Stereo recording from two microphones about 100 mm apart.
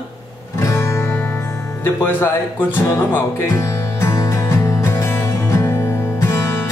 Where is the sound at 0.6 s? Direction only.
30° left (ahead or behind).